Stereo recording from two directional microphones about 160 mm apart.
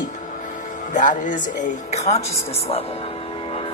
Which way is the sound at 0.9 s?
55° left (ahead or behind).